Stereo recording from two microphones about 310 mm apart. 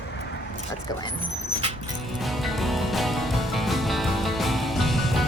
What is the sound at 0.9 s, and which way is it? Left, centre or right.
Speech, centre.